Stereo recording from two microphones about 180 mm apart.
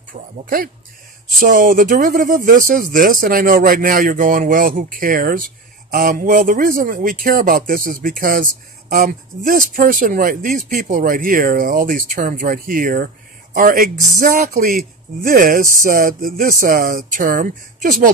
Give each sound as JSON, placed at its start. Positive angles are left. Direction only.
{"t": 0.1, "sound": "speech", "side_deg": -50}